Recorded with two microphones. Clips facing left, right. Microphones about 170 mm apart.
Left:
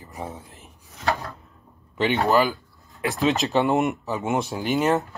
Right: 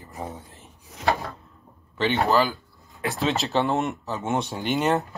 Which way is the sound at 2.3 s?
15° left (ahead or behind).